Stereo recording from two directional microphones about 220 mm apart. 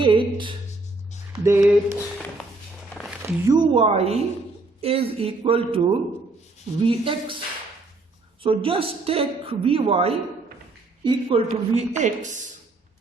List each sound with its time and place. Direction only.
0.0 s speech: 20° right (ahead or behind)
1.3 s speech: 10° right (ahead or behind)
3.2 s a woman's voice: 15° right (ahead or behind)
8.4 s a woman's voice: 25° right (ahead or behind)